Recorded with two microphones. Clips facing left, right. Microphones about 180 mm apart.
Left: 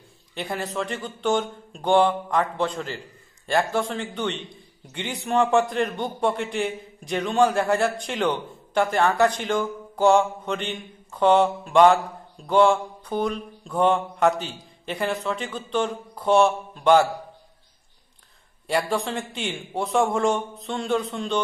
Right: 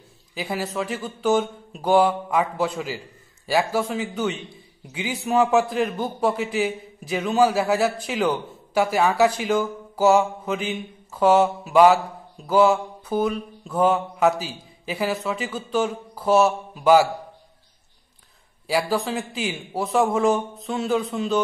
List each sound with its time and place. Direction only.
0.3 s a man's voice: 5° right (ahead or behind)
18.7 s a man's voice: centre (ahead or behind)